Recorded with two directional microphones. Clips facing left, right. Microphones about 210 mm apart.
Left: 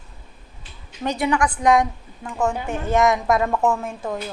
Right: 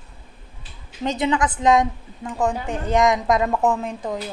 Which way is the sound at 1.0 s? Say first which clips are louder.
Even; 20° right (ahead or behind).